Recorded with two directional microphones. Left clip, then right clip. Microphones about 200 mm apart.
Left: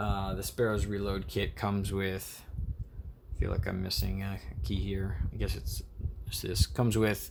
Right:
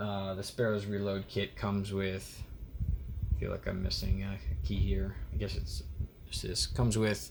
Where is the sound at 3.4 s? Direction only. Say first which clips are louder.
Left 1 dB; 40° left (ahead or behind).